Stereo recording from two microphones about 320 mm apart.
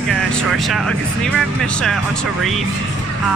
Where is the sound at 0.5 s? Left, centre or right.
Centre.